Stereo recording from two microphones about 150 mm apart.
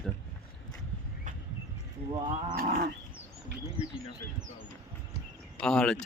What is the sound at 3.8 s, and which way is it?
Bird, 35° right (ahead or behind).